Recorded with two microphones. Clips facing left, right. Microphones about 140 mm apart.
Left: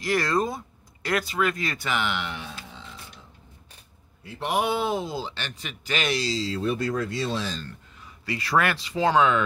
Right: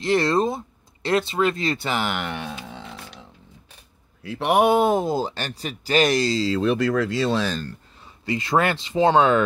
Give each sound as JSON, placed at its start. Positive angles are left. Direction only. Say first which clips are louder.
{"t": 0.0, "sound": "speech", "louder": "right 5 dB", "side_deg": -25}
{"t": 2.7, "sound": "music", "louder": "right 6 dB", "side_deg": -70}
{"t": 4.2, "sound": "speech", "louder": "right 7 dB", "side_deg": -75}
{"t": 8.3, "sound": "speech", "louder": "right 3 dB", "side_deg": -25}